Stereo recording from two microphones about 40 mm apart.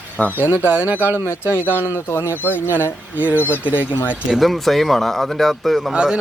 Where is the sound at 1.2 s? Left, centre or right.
Left.